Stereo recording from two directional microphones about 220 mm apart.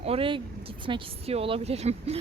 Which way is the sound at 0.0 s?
25° right (ahead or behind).